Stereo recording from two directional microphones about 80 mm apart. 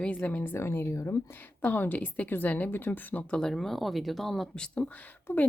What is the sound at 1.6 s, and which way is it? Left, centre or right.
A woman's voice, left.